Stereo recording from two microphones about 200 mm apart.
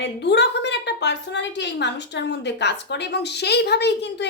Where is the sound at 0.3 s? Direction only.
60° left (ahead or behind).